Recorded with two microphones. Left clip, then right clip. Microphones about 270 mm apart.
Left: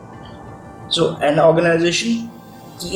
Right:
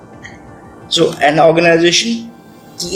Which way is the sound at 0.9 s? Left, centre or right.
Right.